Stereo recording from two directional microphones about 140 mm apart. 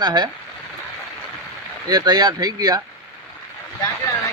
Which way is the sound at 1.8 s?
30° right (ahead or behind).